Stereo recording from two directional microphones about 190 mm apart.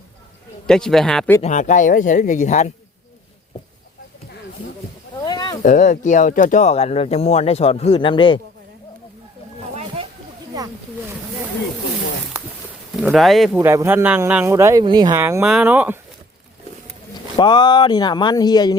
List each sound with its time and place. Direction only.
0.7 s speech: 5° left (ahead or behind)
1.4 s speech: 40° left (ahead or behind)
5.2 s a sound: 20° left (ahead or behind)
5.6 s speech: 45° left (ahead or behind); by 8.4 s 25° left (ahead or behind)
13.0 s speech: 5° right (ahead or behind)
13.6 s speech: 15° right (ahead or behind)
17.3 s speech: 25° left (ahead or behind)